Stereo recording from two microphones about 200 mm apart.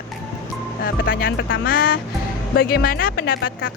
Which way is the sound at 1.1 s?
45° left (ahead or behind).